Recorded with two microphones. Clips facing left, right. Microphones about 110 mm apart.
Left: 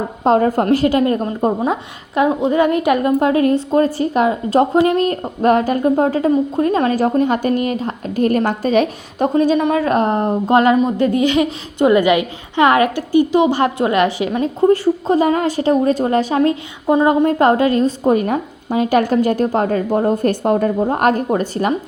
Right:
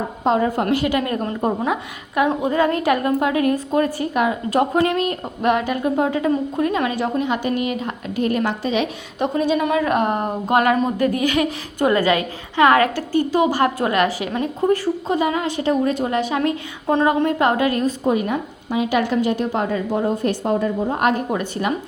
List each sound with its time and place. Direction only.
0.3 s a woman's voice: 45° left (ahead or behind); by 4.9 s 25° left (ahead or behind)
4.9 s a woman's voice: 40° left (ahead or behind)
16.8 s a woman's voice: 10° left (ahead or behind)
17.2 s a woman's voice: 35° left (ahead or behind)
18.1 s a woman's voice: 45° left (ahead or behind)